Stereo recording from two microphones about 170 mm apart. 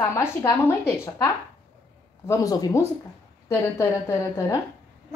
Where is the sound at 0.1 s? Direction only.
15° left (ahead or behind).